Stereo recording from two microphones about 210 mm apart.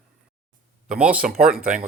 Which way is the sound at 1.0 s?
5° right (ahead or behind).